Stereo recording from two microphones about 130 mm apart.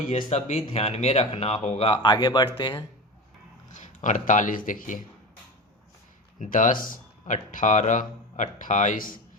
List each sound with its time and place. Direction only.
0.3 s speech: 55° left (ahead or behind); by 2.8 s 35° left (ahead or behind)
3.7 s speech: 70° left (ahead or behind); by 4.9 s 90° left
6.4 s speech: 90° left